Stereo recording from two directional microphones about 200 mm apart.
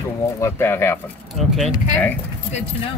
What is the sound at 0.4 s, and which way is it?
Speech, 10° left (ahead or behind).